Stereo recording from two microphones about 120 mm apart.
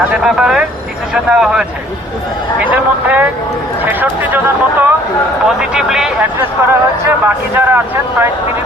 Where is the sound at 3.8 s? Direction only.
15° right (ahead or behind).